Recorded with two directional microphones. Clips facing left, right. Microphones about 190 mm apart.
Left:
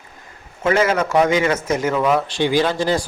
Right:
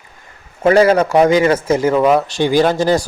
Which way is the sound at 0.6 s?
35° right (ahead or behind).